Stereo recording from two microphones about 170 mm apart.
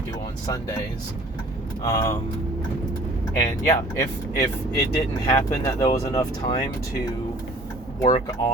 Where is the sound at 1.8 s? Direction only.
20° left (ahead or behind).